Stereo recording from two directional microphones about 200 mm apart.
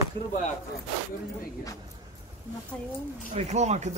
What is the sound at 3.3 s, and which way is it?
Speech, 35° right (ahead or behind).